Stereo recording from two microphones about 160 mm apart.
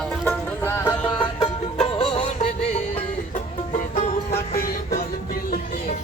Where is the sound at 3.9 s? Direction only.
40° left (ahead or behind).